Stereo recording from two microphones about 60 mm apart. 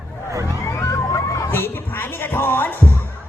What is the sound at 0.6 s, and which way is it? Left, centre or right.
Emergency vehicle, left.